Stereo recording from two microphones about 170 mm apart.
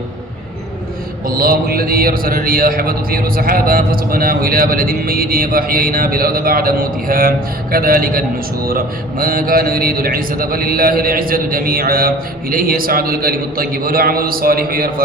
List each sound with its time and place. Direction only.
1.3 s a man's voice: 60° right (ahead or behind)